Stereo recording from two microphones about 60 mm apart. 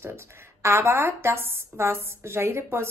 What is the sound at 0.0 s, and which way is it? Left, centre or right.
Speech, right.